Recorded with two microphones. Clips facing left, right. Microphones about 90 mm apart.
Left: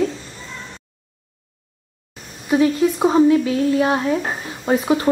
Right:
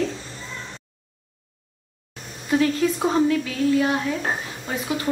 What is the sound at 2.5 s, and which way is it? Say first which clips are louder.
Speech: left 4 dB; 15° left (ahead or behind).